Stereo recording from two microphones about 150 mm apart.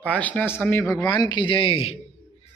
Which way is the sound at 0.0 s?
10° left (ahead or behind).